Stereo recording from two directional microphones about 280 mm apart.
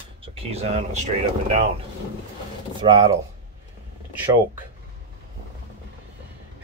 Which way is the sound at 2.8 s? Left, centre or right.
Centre.